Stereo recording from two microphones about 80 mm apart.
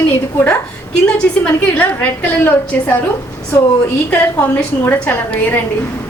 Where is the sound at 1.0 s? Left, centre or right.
Centre.